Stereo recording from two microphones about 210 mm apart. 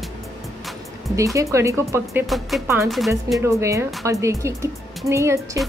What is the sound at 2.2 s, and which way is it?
Speech, centre (ahead or behind).